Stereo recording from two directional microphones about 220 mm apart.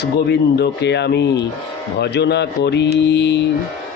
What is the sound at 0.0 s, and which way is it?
Speech, 50° left (ahead or behind).